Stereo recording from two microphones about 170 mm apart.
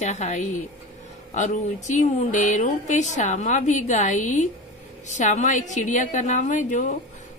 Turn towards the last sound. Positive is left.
turn(degrees=45)  # may be behind; listen again after turning